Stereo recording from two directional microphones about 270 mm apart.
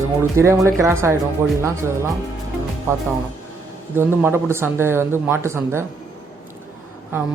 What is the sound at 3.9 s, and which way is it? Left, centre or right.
A man's voice, centre.